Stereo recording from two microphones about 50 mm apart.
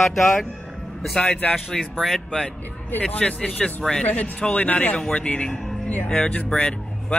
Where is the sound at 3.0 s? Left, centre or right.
Left.